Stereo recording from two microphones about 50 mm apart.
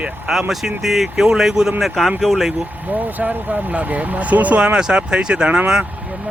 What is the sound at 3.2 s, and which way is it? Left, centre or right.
Speech, right.